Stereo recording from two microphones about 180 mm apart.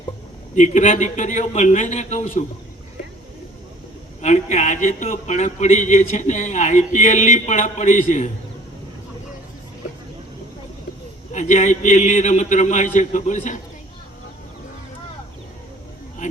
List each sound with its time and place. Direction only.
0.5 s a man's voice: 40° left (ahead or behind)
4.2 s a man's voice: 40° left (ahead or behind)
11.3 s a man's voice: 40° left (ahead or behind)